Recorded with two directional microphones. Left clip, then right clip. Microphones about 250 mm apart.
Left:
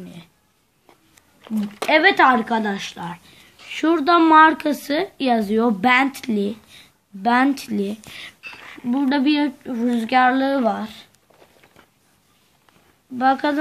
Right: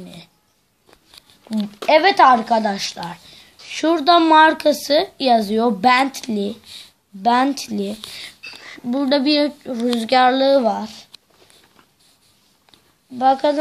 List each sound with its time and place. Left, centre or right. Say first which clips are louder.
0.0 s a sound: right 2 dB; centre
1.9 s a woman's voice: right 3 dB; centre
8.9 s speech: right 3 dB; centre
10.7 s speech: right 2 dB; centre
13.2 s speech: right 3 dB; centre